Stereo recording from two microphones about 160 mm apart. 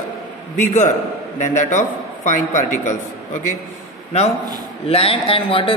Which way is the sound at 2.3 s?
50° left (ahead or behind).